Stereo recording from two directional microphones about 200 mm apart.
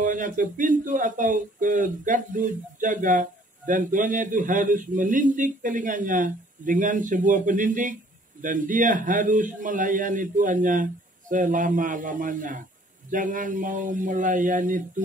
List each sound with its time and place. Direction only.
0.0 s speech: 40° right (ahead or behind)